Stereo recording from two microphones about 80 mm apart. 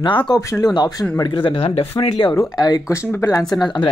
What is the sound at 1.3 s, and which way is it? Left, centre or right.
Speech, left.